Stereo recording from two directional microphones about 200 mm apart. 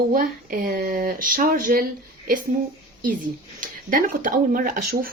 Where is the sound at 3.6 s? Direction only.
40° right (ahead or behind).